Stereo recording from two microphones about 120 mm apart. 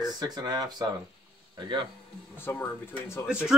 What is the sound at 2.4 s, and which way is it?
Speech, 15° left (ahead or behind).